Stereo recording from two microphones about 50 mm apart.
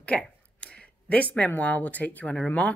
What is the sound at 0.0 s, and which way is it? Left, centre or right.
Speech, left.